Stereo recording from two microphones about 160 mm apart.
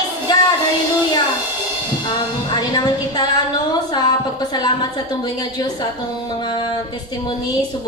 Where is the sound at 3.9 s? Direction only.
25° left (ahead or behind).